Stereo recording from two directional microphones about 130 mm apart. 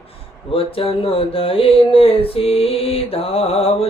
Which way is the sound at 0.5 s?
45° left (ahead or behind).